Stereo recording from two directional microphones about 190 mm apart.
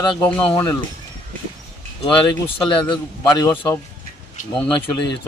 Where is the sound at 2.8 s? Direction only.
25° left (ahead or behind).